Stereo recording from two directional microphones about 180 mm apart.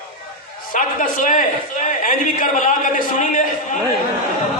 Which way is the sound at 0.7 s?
45° left (ahead or behind).